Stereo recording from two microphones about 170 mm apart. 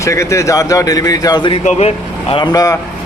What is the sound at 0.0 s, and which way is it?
Speech, 15° left (ahead or behind).